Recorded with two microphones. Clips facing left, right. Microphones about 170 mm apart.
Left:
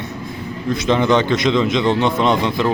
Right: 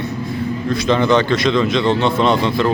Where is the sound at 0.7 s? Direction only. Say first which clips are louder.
Even; 15° left (ahead or behind).